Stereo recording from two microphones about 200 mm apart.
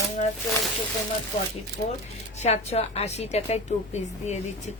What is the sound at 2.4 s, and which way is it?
A woman's voice, 30° left (ahead or behind).